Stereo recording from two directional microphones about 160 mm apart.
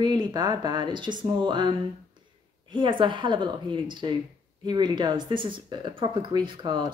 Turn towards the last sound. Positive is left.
turn(degrees=-30)  # may be behind; listen again after turning